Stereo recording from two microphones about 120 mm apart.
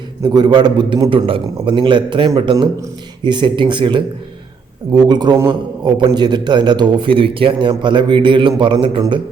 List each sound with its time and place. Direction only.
0.2 s a man's voice: 35° right (ahead or behind)
1.1 s a man's voice: 45° right (ahead or behind)